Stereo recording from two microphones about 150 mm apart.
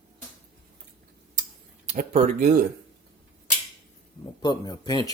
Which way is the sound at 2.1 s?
50° right (ahead or behind).